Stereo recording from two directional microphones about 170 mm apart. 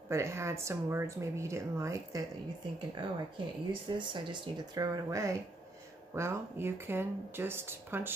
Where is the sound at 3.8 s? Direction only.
30° right (ahead or behind).